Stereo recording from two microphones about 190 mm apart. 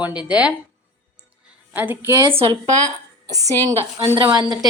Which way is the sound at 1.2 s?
10° right (ahead or behind).